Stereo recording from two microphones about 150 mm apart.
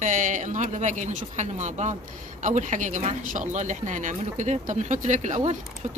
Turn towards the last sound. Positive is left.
turn(degrees=-50)  # may be behind; listen again after turning